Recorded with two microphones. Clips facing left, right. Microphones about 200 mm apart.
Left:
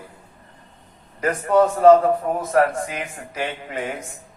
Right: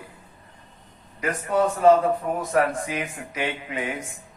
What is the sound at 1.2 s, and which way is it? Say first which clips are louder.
Speech: left 5 dB; 45° left (ahead or behind).